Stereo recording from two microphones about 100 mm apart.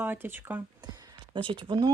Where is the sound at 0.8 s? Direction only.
45° right (ahead or behind).